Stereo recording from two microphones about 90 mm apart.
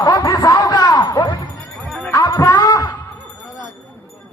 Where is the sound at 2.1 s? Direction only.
40° left (ahead or behind).